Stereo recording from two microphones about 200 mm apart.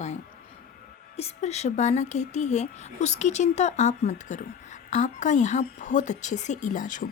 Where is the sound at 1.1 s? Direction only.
30° left (ahead or behind).